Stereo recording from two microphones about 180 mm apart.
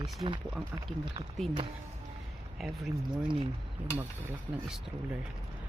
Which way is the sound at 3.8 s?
10° right (ahead or behind).